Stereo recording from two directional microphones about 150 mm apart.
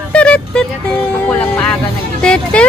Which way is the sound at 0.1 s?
5° left (ahead or behind).